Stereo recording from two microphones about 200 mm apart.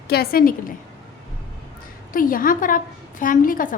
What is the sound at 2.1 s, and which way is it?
A woman's voice, 45° left (ahead or behind).